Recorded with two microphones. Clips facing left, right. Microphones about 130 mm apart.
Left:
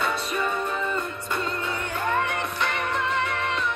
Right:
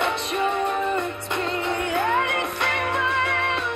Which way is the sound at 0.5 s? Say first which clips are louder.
Right 4 dB; 65° right (ahead or behind).